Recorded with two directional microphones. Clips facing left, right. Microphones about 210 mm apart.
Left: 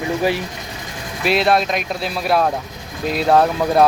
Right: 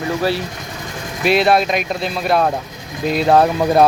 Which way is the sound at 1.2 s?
Centre (ahead or behind).